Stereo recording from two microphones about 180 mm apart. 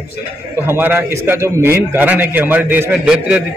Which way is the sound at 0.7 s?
10° right (ahead or behind).